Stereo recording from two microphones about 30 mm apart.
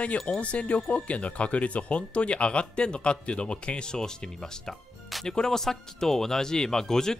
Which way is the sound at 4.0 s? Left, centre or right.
Left.